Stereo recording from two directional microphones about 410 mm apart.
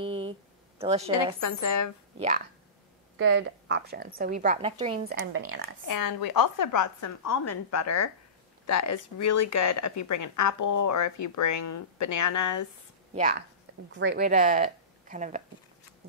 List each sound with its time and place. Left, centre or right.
0.0 s a sound: centre
1.1 s speech: left
2.1 s speech: centre
3.2 s speech: right
5.9 s speech: left
13.1 s a woman's voice: centre